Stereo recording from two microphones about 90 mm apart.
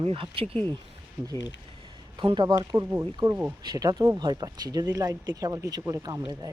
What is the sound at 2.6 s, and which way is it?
Speech, 35° right (ahead or behind).